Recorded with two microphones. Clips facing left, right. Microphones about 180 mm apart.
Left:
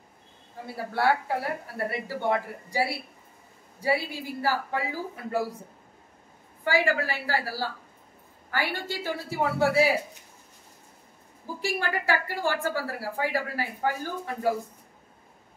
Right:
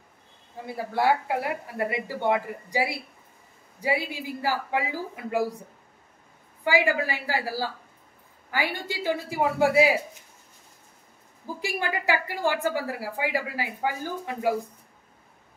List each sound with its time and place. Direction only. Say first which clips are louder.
0.9 s speech: right 1 dB; 15° right (ahead or behind)
6.6 s speech: right 1 dB; 15° right (ahead or behind)
11.6 s speech: even; 15° right (ahead or behind)